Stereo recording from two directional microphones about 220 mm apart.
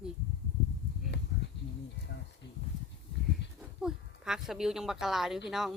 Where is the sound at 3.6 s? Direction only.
5° right (ahead or behind).